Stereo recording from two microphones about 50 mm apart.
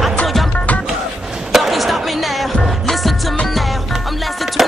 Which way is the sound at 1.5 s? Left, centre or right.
Centre.